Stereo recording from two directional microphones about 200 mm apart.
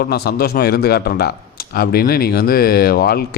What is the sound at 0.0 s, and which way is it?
Speech, 50° left (ahead or behind).